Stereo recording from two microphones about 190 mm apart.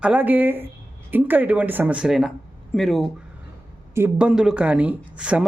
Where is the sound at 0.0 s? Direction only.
10° right (ahead or behind).